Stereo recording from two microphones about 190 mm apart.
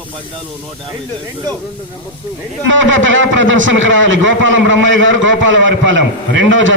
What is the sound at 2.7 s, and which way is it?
A man's voice, 80° right.